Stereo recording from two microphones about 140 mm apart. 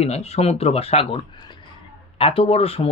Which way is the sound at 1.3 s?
30° left (ahead or behind).